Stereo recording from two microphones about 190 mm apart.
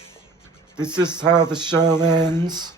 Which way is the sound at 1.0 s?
25° right (ahead or behind).